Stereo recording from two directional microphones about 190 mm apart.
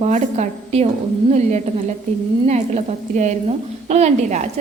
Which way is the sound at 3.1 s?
40° right (ahead or behind).